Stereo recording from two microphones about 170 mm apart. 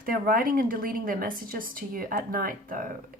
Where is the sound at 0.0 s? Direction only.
55° right (ahead or behind).